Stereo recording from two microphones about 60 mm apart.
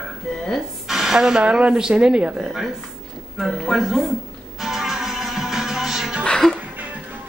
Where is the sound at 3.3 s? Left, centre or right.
Centre.